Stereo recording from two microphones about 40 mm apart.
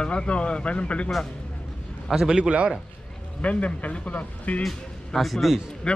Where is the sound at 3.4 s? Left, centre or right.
Left.